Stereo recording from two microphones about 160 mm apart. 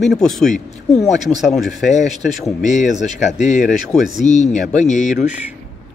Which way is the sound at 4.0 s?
Centre (ahead or behind).